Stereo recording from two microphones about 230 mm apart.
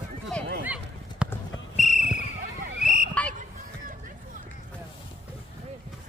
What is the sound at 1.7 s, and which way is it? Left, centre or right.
Basketball bounce, left.